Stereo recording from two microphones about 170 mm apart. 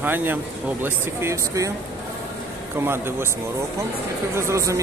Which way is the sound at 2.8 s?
15° right (ahead or behind).